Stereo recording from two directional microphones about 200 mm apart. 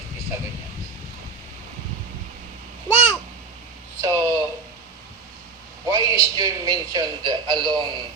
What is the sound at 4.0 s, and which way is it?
Speech, 15° right (ahead or behind).